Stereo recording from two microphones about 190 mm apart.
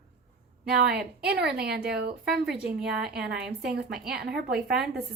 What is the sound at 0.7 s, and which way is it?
Speech, 55° right (ahead or behind).